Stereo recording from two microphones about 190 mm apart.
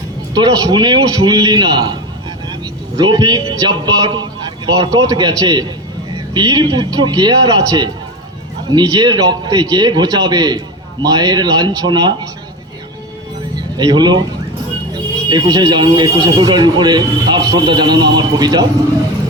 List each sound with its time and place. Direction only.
0.3 s speech: 20° right (ahead or behind)
3.0 s speech: 20° right (ahead or behind)
13.6 s speech: 20° right (ahead or behind)
15.3 s speech: 20° right (ahead or behind)